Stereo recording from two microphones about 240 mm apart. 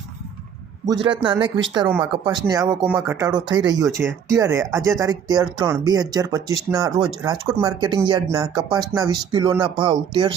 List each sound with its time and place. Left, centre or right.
1.2 s speech: centre